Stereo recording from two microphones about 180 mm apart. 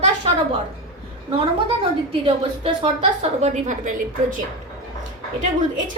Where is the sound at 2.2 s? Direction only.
30° right (ahead or behind).